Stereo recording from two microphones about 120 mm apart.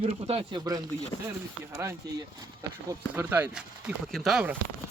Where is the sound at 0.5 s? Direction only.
35° right (ahead or behind).